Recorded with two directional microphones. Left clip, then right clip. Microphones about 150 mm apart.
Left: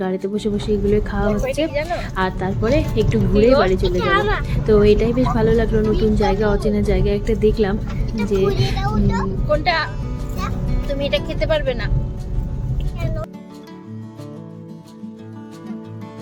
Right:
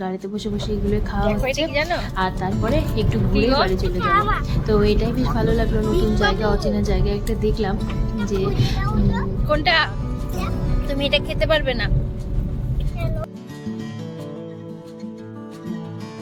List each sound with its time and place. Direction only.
0.0 s a woman's voice: 10° left (ahead or behind)
2.0 s a woman's voice: 10° left (ahead or behind)
4.0 s speech: 25° left (ahead or behind)
4.4 s a woman's voice: 10° left (ahead or behind)
11.5 s speech: centre (ahead or behind)